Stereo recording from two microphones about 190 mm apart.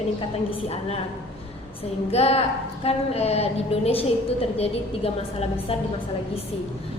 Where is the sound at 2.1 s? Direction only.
35° left (ahead or behind).